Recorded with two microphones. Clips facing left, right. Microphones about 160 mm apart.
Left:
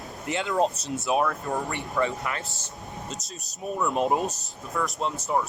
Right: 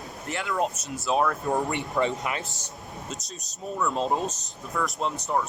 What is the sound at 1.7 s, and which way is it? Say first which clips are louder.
Speech: right 1 dB; 20° right (ahead or behind).